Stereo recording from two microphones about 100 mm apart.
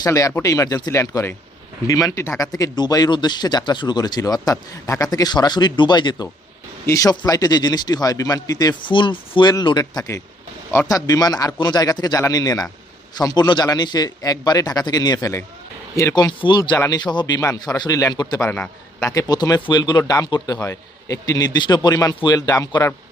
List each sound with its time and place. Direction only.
0.0 s a man's voice: 35° left (ahead or behind)
6.8 s a man's voice: 35° left (ahead or behind)
8.9 s a man's voice: 55° left (ahead or behind)
16.4 s speech: 50° left (ahead or behind)
16.7 s speech: 30° left (ahead or behind)
17.0 s a man's voice: 45° left (ahead or behind)